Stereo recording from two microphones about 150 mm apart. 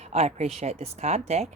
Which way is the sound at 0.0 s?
45° right (ahead or behind).